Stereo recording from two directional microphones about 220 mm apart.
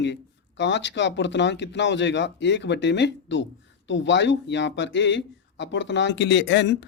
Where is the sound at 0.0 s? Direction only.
55° left (ahead or behind).